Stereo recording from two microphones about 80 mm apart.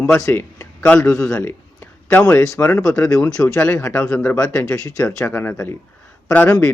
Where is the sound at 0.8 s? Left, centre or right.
Centre.